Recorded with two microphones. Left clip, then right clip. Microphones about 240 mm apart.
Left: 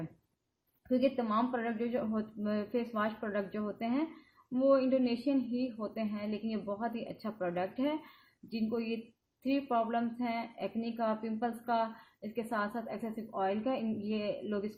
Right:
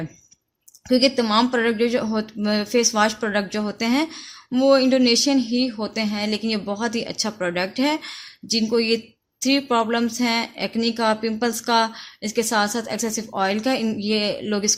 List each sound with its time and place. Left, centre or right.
0.9 s speech: right